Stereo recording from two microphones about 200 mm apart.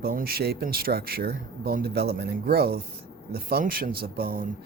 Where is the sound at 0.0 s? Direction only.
50° right (ahead or behind).